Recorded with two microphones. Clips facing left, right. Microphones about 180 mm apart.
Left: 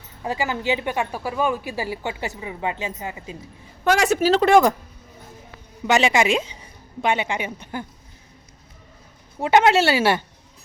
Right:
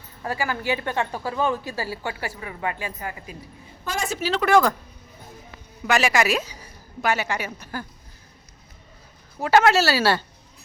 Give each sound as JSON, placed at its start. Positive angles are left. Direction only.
{"t": 0.2, "sound": "a woman's voice", "side_deg": 20}
{"t": 3.8, "sound": "a woman's voice", "side_deg": 75}
{"t": 4.2, "sound": "speech", "side_deg": 35}
{"t": 4.4, "sound": "a woman's voice", "side_deg": 20}
{"t": 5.9, "sound": "a woman's voice", "side_deg": 20}
{"t": 9.4, "sound": "a woman's voice", "side_deg": 20}